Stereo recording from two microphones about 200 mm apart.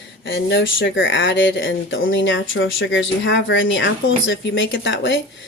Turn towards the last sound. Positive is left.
turn(degrees=65)  # may be behind; listen again after turning